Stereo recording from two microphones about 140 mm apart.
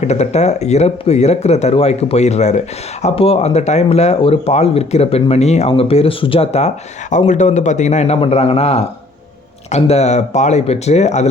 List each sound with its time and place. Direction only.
0.0 s speech: 50° left (ahead or behind)